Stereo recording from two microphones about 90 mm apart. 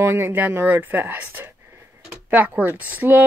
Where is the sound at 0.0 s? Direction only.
25° right (ahead or behind).